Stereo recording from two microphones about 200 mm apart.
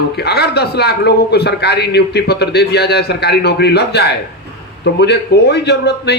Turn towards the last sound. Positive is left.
turn(degrees=55)  # may be behind; listen again after turning